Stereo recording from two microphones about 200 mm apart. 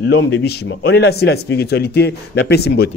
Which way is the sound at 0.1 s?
55° left (ahead or behind).